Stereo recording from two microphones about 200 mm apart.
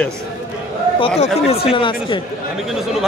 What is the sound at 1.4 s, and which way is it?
Speech, 30° left (ahead or behind).